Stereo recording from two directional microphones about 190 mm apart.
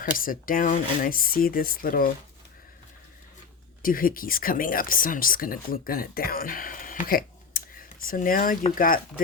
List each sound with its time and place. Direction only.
0.0 s speech: 50° left (ahead or behind)
3.8 s speech: 50° left (ahead or behind)